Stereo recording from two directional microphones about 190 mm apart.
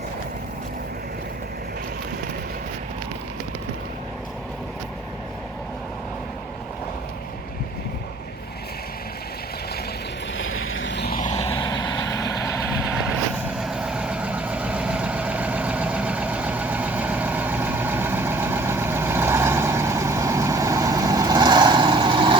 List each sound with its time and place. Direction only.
10.3 s vehicle: 90° left; by 11.2 s 60° left (ahead or behind)
11.2 s vehicle: 35° left (ahead or behind)
11.4 s vehicle: 25° left (ahead or behind)
12.8 s vehicle: 5° right (ahead or behind); by 22.4 s 25° right (ahead or behind)